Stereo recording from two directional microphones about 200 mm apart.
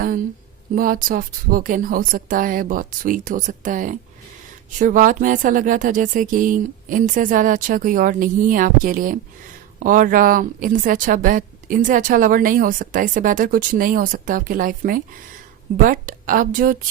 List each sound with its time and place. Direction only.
0.8 s a woman's voice: 45° right (ahead or behind)